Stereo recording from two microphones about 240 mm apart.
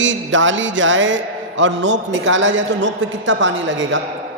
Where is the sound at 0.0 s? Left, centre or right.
Right.